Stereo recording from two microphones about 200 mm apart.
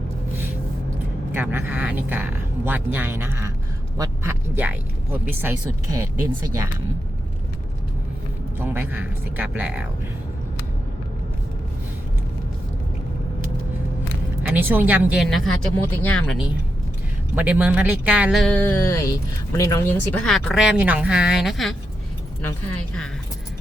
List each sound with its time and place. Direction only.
1.3 s speech: 10° right (ahead or behind)
8.5 s speech: 10° right (ahead or behind)
14.4 s speech: 10° right (ahead or behind)
17.3 s speech: 5° right (ahead or behind); by 20.0 s 15° left (ahead or behind)
20.2 s speech: centre (ahead or behind)